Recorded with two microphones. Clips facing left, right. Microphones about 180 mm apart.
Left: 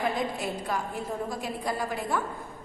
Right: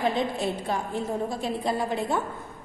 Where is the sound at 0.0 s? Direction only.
25° right (ahead or behind).